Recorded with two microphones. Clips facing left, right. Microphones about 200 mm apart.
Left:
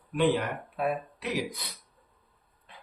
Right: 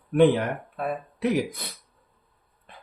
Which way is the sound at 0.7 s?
5° left (ahead or behind).